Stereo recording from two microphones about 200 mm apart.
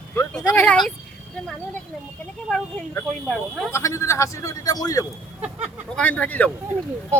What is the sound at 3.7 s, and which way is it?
Speech, 15° left (ahead or behind).